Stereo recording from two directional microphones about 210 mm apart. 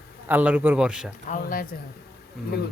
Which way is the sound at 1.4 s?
45° left (ahead or behind).